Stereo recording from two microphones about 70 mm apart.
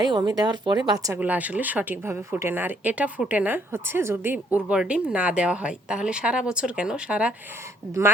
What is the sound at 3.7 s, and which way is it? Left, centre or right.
Speech, right.